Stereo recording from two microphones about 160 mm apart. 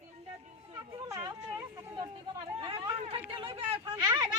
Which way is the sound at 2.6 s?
35° right (ahead or behind).